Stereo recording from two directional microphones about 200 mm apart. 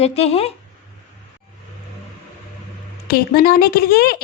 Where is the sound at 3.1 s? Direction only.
50° left (ahead or behind).